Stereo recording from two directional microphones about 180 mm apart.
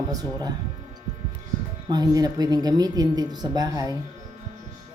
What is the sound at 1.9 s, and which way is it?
Speech, 20° right (ahead or behind).